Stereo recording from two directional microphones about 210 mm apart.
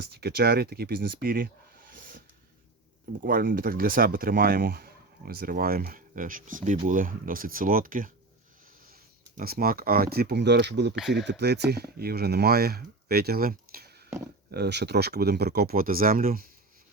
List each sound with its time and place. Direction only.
0.0 s speech: 50° right (ahead or behind)
3.2 s speech: 40° right (ahead or behind)
9.4 s speech: 45° right (ahead or behind)